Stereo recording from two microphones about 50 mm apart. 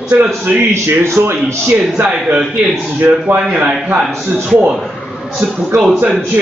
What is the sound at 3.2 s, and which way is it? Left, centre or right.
Speech, right.